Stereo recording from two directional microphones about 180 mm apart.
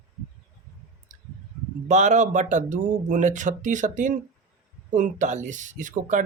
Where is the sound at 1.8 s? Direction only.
40° right (ahead or behind).